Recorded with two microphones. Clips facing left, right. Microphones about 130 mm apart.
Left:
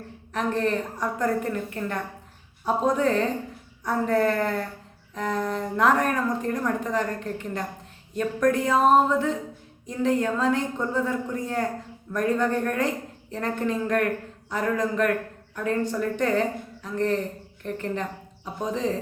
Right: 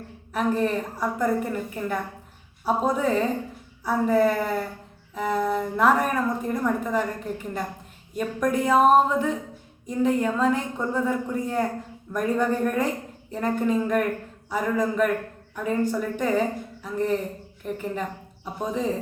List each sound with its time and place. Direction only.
0.3 s a woman's voice: 10° right (ahead or behind)